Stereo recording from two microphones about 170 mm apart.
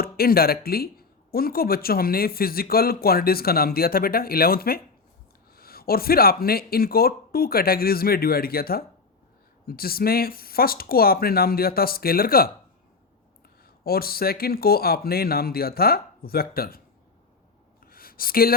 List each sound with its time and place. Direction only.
0.0 s speech: 60° left (ahead or behind)
13.8 s speech: 60° left (ahead or behind)
17.8 s a sound: 60° left (ahead or behind)